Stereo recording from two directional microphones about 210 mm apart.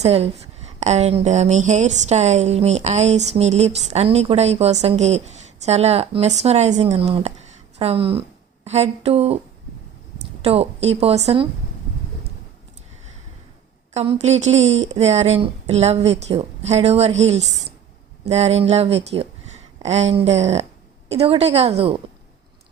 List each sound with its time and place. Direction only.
0.0 s a woman's voice: 30° right (ahead or behind)
10.4 s a woman's voice: 30° right (ahead or behind)
13.9 s speech: 30° right (ahead or behind)
17.4 s a woman's voice: centre (ahead or behind)
18.3 s a woman's voice: 30° right (ahead or behind)